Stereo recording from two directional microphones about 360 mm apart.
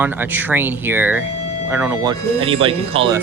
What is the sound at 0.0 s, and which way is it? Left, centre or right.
Speech, centre.